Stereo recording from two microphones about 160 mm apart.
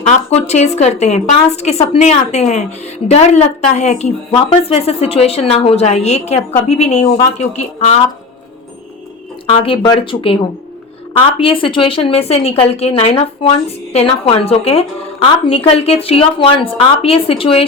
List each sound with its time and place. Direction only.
0.0 s a woman's voice: 40° left (ahead or behind)
9.5 s a woman's voice: 35° left (ahead or behind)